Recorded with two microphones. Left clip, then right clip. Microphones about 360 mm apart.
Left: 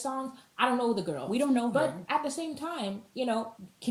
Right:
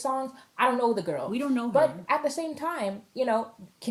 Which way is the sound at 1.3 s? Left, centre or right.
Centre.